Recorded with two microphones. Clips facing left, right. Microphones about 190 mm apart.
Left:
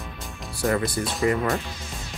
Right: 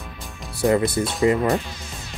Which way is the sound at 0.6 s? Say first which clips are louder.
Right 5 dB; 25° right (ahead or behind).